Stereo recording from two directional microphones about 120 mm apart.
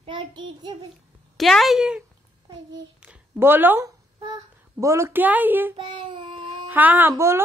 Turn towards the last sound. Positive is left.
turn(degrees=-20)  # may be behind; listen again after turning